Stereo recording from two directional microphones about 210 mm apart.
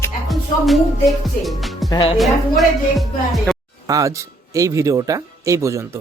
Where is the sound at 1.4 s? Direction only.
Centre (ahead or behind).